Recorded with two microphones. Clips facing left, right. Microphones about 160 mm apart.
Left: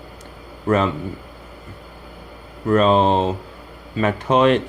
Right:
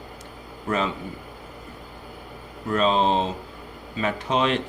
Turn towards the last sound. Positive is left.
turn(degrees=55)  # may be behind; listen again after turning